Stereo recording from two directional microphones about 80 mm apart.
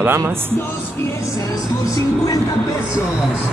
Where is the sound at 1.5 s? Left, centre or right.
Left.